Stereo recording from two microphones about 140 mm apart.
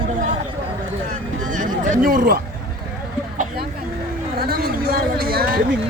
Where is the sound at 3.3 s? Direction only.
65° right (ahead or behind).